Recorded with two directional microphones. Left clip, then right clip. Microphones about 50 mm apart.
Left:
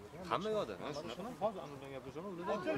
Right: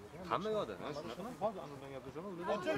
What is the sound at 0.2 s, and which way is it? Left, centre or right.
A man's voice, left.